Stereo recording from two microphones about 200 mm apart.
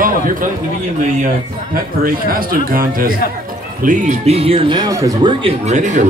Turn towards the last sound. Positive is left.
turn(degrees=-35)  # may be behind; listen again after turning